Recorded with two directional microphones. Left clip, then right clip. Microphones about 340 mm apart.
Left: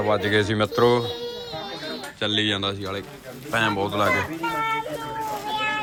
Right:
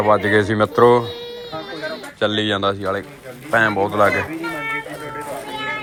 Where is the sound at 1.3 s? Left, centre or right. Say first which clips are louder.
Right 3 dB; centre.